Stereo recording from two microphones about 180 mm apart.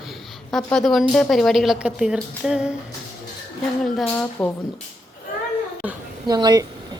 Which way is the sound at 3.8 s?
5° left (ahead or behind).